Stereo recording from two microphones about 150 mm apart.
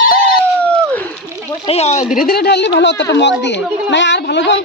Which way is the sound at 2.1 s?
85° left.